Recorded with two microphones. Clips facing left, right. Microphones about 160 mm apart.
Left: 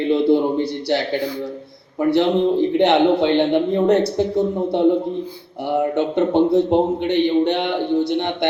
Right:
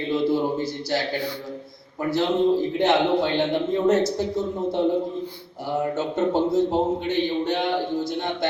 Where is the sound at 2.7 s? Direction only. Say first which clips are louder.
Left 5 dB; 65° left (ahead or behind).